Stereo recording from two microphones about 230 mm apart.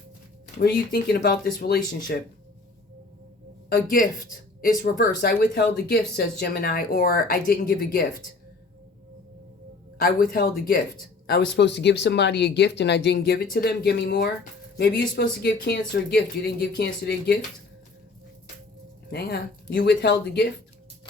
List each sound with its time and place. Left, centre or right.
0.9 s speech: left
3.7 s speech: left
10.0 s speech: left
19.1 s speech: left